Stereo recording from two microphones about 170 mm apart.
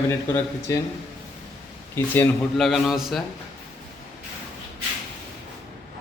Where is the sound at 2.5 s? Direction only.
Centre (ahead or behind).